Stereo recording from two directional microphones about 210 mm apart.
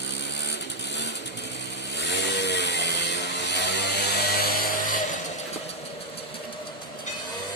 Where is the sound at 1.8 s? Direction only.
55° left (ahead or behind).